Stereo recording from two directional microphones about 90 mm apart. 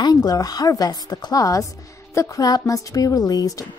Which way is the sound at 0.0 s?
45° left (ahead or behind).